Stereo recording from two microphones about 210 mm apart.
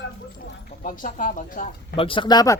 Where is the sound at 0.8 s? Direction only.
40° left (ahead or behind).